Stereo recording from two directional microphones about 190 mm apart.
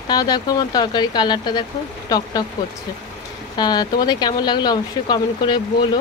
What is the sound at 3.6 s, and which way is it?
Speech, 20° left (ahead or behind).